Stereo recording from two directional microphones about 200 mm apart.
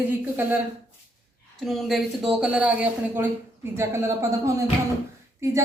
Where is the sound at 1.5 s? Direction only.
Centre (ahead or behind).